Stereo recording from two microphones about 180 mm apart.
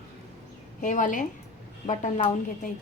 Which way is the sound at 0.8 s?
45° left (ahead or behind).